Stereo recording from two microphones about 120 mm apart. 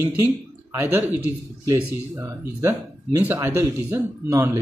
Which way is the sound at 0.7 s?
25° right (ahead or behind).